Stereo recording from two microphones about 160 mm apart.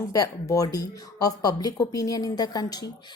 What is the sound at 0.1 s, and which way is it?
A woman's voice, 20° left (ahead or behind).